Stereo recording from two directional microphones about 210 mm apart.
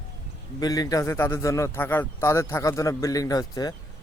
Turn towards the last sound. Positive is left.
turn(degrees=20)  # may be behind; listen again after turning